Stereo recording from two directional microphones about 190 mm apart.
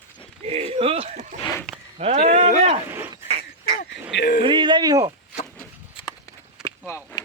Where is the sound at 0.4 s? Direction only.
30° right (ahead or behind).